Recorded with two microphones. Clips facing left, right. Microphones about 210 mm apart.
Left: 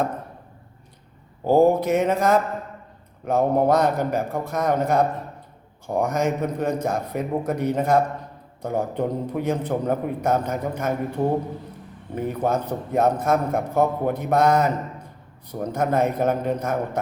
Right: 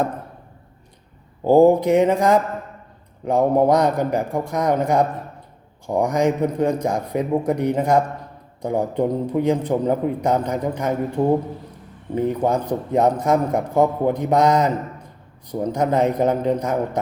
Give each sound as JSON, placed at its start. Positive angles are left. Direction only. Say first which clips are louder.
{"t": 1.5, "sound": "a man's voice", "louder": "right 4 dB", "side_deg": -15}
{"t": 12.1, "sound": "a man's voice", "louder": "right 4 dB", "side_deg": -15}